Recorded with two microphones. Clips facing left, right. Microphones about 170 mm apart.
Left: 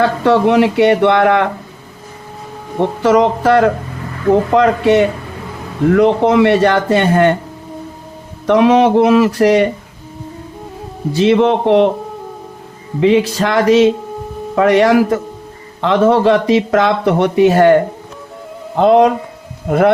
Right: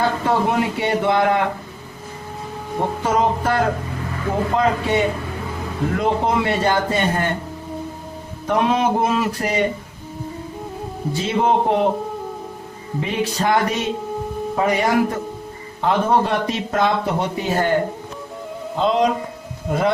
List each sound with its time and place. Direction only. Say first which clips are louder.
0.0 s speech: left 7 dB; 80° left
3.0 s speech: left 9 dB; 80° left
8.4 s speech: left 9 dB; 85° left
11.1 s speech: left 8 dB; 75° left (ahead or behind)
13.0 s speech: left 10 dB; 90° left
14.5 s speech: left 9 dB; 80° left
18.8 s speech: left 9 dB; 60° left (ahead or behind)